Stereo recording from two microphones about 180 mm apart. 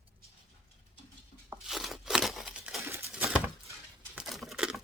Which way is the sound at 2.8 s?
10° right (ahead or behind).